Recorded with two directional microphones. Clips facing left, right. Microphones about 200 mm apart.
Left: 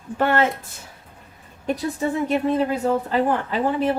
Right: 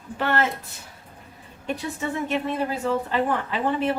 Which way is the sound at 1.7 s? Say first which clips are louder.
Left 5 dB; 40° left (ahead or behind).